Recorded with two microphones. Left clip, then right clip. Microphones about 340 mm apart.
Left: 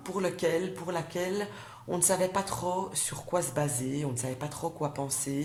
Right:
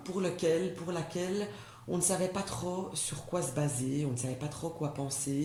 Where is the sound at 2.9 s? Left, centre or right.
Left.